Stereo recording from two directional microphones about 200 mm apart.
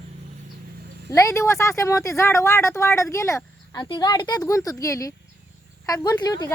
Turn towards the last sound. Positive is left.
turn(degrees=20)  # may be behind; listen again after turning